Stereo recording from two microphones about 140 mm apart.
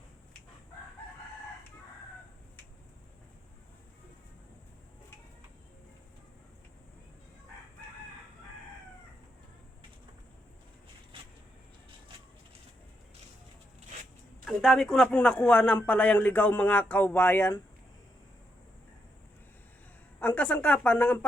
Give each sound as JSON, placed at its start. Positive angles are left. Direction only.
{"t": 14.4, "sound": "a man's voice", "side_deg": 0}
{"t": 20.1, "sound": "speech", "side_deg": 10}